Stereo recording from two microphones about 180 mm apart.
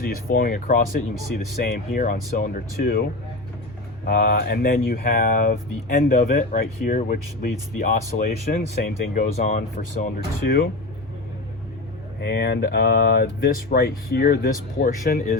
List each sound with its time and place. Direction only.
0.0 s speech: 55° left (ahead or behind)
10.4 s speech: 60° left (ahead or behind)
12.2 s speech: 60° left (ahead or behind)